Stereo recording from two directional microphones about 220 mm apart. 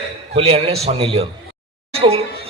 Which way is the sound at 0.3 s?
25° right (ahead or behind).